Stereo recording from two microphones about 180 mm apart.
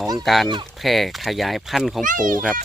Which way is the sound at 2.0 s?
45° right (ahead or behind).